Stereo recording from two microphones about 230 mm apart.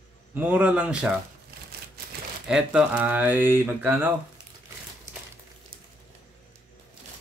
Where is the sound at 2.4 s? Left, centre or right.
Centre.